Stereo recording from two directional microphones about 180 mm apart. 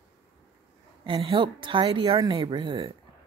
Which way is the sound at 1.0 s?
30° right (ahead or behind).